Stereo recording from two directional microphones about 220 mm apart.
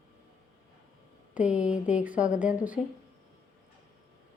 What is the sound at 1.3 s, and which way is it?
Speech, 5° right (ahead or behind).